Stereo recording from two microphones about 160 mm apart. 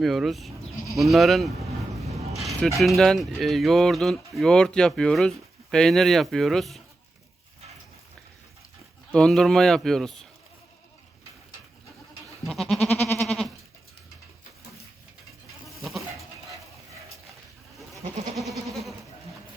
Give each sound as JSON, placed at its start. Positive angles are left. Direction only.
{"t": 0.0, "sound": "speech", "side_deg": 0}
{"t": 9.1, "sound": "speech", "side_deg": 5}
{"t": 12.5, "sound": "goat", "side_deg": 0}
{"t": 15.8, "sound": "goat", "side_deg": 0}
{"t": 18.3, "sound": "goat", "side_deg": 0}